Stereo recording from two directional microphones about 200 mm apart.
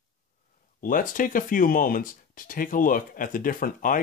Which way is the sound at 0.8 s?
45° left (ahead or behind).